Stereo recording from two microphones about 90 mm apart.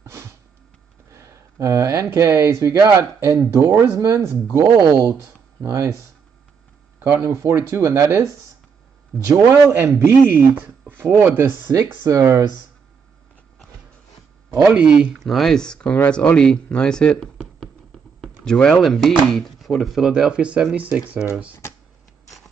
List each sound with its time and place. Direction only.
0.0 s a sound: 30° right (ahead or behind)
1.1 s speech: 35° right (ahead or behind)
7.0 s speech: 30° right (ahead or behind)
9.5 s speech: 25° right (ahead or behind)
12.1 s speech: 35° right (ahead or behind)
14.5 s speech: 30° right (ahead or behind)
14.8 s speech: 10° right (ahead or behind)
15.1 s speech: centre (ahead or behind); by 21.3 s 15° right (ahead or behind)